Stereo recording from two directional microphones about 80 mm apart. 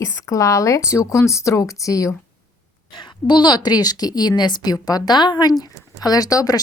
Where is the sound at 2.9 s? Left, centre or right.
Left.